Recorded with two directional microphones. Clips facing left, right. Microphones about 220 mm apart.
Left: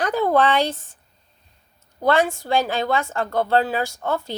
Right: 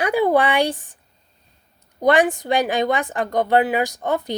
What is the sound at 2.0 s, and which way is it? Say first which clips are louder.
Speech: right 3 dB; 15° right (ahead or behind).